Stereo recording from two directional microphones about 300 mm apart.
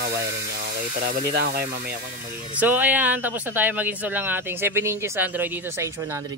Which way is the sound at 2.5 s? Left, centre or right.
Centre.